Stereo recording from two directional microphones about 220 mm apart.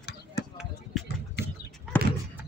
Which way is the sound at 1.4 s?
50° left (ahead or behind).